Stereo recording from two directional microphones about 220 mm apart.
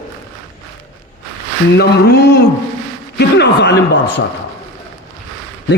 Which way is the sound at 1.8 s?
45° left (ahead or behind).